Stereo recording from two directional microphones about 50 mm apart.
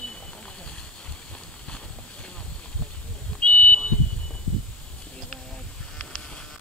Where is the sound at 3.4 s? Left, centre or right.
Left.